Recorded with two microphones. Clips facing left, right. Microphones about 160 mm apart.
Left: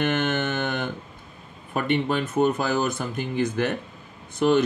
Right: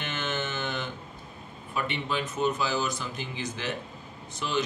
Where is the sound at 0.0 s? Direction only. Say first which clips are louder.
Left 9 dB; 55° left (ahead or behind).